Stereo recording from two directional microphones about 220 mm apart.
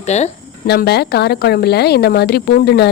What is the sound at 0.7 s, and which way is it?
A woman's voice, 45° left (ahead or behind).